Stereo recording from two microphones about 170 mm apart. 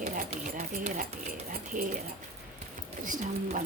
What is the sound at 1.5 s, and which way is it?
Dishes, 55° right (ahead or behind).